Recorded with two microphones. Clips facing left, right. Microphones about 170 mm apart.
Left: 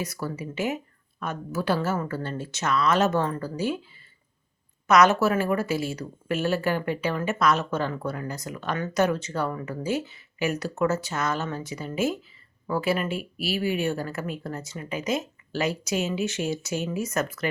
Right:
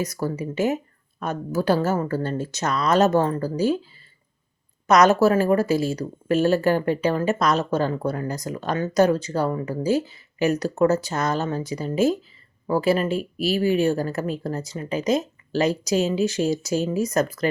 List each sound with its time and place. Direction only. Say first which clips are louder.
0.0 s speech: right 5 dB; 40° right (ahead or behind)
4.9 s speech: right 3 dB; 40° right (ahead or behind)